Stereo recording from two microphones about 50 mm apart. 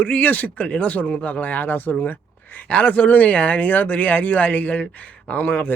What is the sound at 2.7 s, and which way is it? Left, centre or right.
Speech, left.